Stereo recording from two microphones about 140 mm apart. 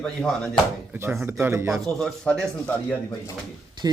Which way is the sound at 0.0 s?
5° left (ahead or behind).